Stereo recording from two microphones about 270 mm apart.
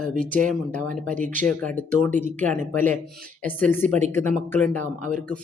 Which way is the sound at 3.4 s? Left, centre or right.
Centre.